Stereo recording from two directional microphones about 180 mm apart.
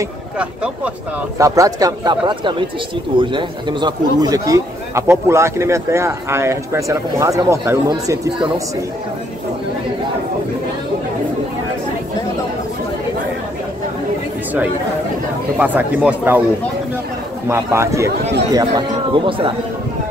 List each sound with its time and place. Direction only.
0.4 s a man's voice: 5° right (ahead or behind)
1.4 s a man's voice: 20° right (ahead or behind)
15.5 s a man's voice: 10° right (ahead or behind)
17.5 s a man's voice: 15° right (ahead or behind)